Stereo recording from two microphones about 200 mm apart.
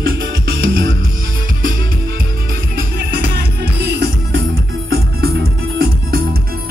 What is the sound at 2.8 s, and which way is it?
Music, 50° right (ahead or behind).